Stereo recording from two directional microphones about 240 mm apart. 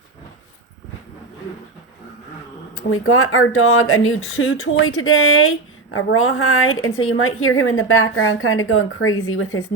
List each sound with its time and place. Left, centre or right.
2.9 s speech: left